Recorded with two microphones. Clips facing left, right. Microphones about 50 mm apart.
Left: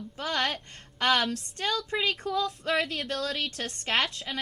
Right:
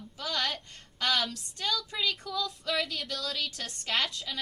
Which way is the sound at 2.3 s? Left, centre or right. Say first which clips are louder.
Left 5 dB; left.